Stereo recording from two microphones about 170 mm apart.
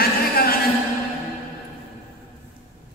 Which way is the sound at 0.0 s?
60° left (ahead or behind).